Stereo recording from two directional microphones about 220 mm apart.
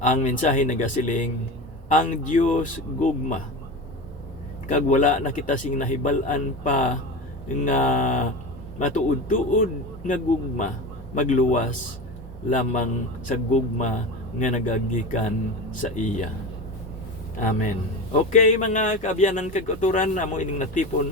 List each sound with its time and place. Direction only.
0.0 s a man's voice: 35° left (ahead or behind)
4.7 s a man's voice: 35° left (ahead or behind)
18.3 s a man's voice: 35° left (ahead or behind)